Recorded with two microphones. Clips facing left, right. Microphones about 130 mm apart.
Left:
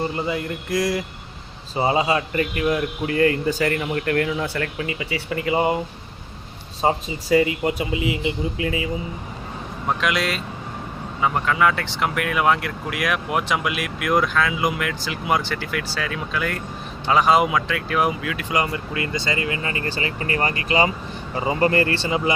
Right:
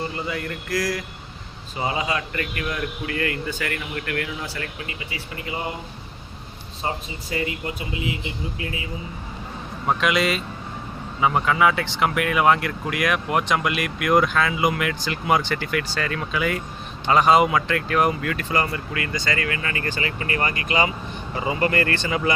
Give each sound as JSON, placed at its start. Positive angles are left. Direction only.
{"t": 0.3, "sound": "speech", "side_deg": 20}
{"t": 4.4, "sound": "speech", "side_deg": 60}
{"t": 5.1, "sound": "speech", "side_deg": 90}
{"t": 6.8, "sound": "speech", "side_deg": 90}
{"t": 9.8, "sound": "speech", "side_deg": 0}
{"t": 18.4, "sound": "speech", "side_deg": 15}